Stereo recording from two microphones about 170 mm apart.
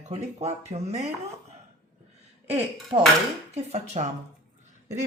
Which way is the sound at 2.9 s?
35° right (ahead or behind).